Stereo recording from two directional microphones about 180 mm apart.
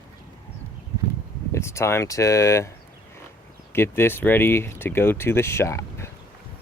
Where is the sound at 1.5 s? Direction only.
15° left (ahead or behind).